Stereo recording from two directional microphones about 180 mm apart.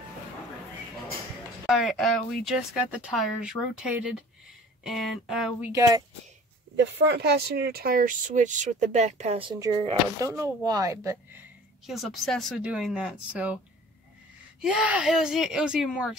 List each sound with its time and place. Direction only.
1.7 s speech: centre (ahead or behind)
5.7 s speech: 20° right (ahead or behind)
6.8 s speech: 65° right (ahead or behind); by 11.4 s 15° right (ahead or behind)
11.8 s speech: centre (ahead or behind)
14.6 s speech: 5° right (ahead or behind)